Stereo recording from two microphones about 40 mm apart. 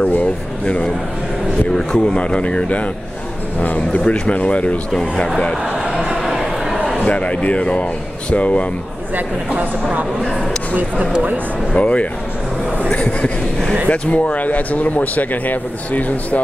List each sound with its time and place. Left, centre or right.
1.7 s a man's voice: centre
6.2 s a sound: centre
7.1 s a man's voice: left
10.7 s speech: right
11.7 s a man's voice: left